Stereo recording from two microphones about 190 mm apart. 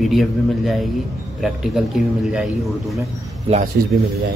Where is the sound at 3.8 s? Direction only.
50° right (ahead or behind).